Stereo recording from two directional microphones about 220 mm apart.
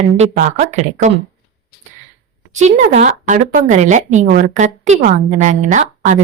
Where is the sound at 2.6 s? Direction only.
30° right (ahead or behind).